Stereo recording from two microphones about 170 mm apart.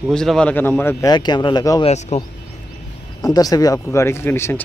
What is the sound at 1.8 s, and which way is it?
Speech, 40° left (ahead or behind).